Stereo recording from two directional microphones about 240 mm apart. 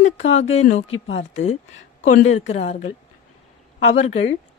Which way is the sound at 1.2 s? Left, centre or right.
Left.